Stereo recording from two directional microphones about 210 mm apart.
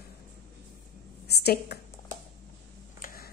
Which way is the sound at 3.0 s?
45° left (ahead or behind).